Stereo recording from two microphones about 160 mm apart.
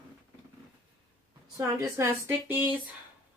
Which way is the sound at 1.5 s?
20° right (ahead or behind).